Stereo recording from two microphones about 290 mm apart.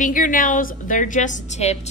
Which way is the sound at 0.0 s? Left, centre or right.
Left.